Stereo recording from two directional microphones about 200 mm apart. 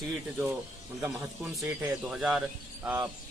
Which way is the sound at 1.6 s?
5° right (ahead or behind).